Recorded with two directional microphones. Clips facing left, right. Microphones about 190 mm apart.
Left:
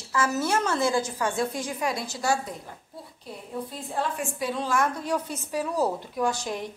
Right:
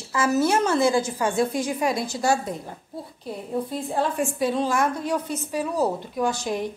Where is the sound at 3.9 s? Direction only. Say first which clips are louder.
Right 5 dB; 30° right (ahead or behind).